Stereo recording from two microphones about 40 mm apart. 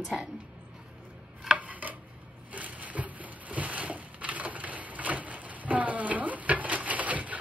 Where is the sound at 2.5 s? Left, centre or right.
Right.